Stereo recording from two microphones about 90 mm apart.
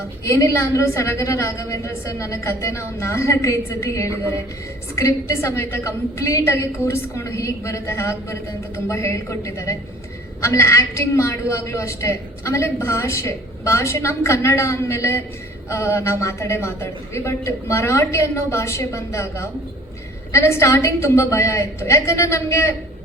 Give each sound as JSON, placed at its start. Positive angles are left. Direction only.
{"t": 0.3, "sound": "a woman's voice", "side_deg": 35}